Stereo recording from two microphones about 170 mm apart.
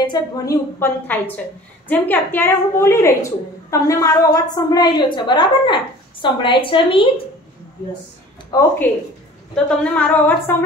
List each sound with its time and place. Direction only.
0.0 s a woman's voice: 25° left (ahead or behind)
0.7 s a woman's voice: 10° left (ahead or behind); by 7.1 s 30° left (ahead or behind)
8.5 s a woman's voice: 15° left (ahead or behind)
9.9 s a woman's voice: 10° left (ahead or behind)